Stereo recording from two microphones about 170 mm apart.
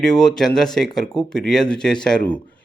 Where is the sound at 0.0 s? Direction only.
5° left (ahead or behind).